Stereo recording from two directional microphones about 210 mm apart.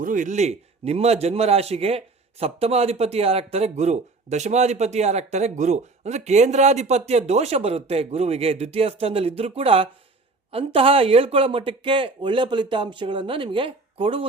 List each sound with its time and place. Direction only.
0.0 s a man's voice: 40° right (ahead or behind)